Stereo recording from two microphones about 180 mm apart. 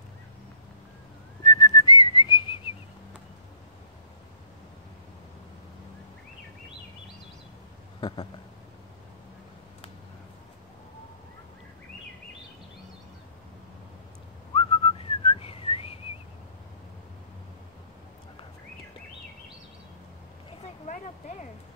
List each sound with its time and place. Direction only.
1.4 s whistling: 20° left (ahead or behind)
14.5 s whistling: 30° left (ahead or behind)
20.8 s a sound: 40° left (ahead or behind)